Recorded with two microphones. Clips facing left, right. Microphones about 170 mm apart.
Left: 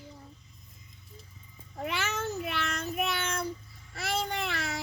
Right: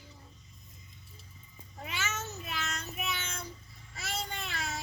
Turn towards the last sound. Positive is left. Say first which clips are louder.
# left 5 dB
turn(degrees=65)  # may be behind; listen again after turning